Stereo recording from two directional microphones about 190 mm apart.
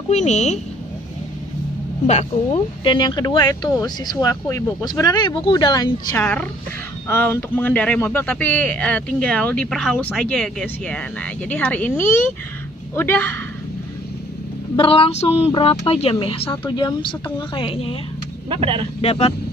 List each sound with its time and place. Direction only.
0.1 s speech: 35° left (ahead or behind)
2.0 s speech: 35° left (ahead or behind)
6.1 s speech: 10° left (ahead or behind)
12.9 s speech: 10° left (ahead or behind)
14.8 s speech: 30° left (ahead or behind)
18.5 s speech: 25° right (ahead or behind)
18.9 s speech: 30° left (ahead or behind)